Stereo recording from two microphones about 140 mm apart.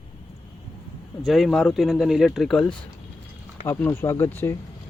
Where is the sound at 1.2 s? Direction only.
Centre (ahead or behind).